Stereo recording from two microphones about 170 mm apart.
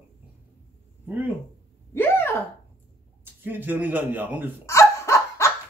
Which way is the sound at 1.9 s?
15° left (ahead or behind).